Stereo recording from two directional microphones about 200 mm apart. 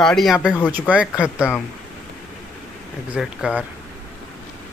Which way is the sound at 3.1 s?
5° right (ahead or behind).